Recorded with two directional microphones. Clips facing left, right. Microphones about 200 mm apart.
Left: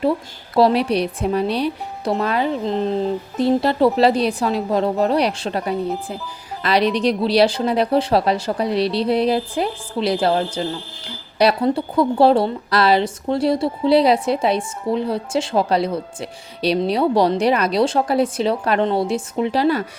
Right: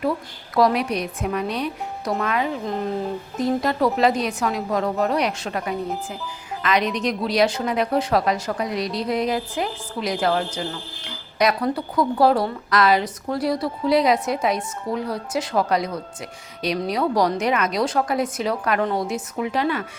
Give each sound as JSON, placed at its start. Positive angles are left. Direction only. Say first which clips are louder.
{"t": 0.5, "sound": "a woman's voice", "louder": "left 4 dB", "side_deg": 30}